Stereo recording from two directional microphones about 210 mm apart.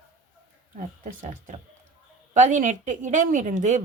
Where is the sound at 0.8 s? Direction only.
35° right (ahead or behind).